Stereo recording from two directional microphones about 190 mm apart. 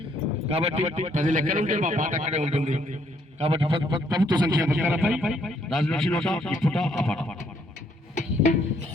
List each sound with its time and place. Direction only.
0.5 s speech: 35° right (ahead or behind)
3.4 s a man's voice: 30° right (ahead or behind); by 7.3 s 5° left (ahead or behind)
8.1 s music: 40° left (ahead or behind)